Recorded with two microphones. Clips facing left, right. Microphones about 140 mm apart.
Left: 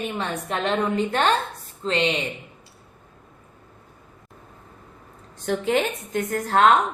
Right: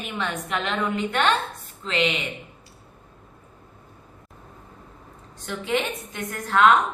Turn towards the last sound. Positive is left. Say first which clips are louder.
# left 1 dB
turn(degrees=40)  # may be behind; listen again after turning